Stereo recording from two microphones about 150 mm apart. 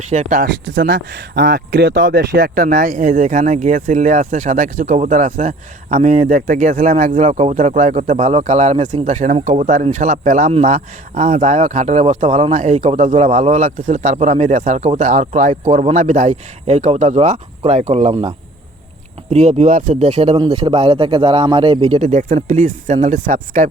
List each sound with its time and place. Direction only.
0.0 s speech: 55° right (ahead or behind)
1.4 s speech: 70° right (ahead or behind); by 18.3 s 45° right (ahead or behind)
19.3 s speech: 45° right (ahead or behind)